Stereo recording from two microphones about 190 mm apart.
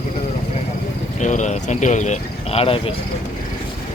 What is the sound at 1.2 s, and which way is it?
Speech, 40° left (ahead or behind).